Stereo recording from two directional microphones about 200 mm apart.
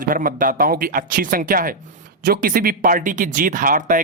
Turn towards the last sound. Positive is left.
turn(degrees=-40)  # may be behind; listen again after turning